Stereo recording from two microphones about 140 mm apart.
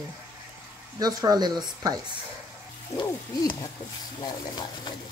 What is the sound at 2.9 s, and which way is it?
Hoot, 30° left (ahead or behind).